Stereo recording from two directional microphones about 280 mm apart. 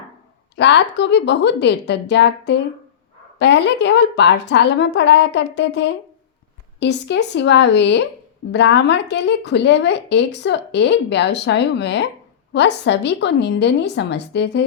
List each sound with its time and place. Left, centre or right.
0.5 s a woman's voice: left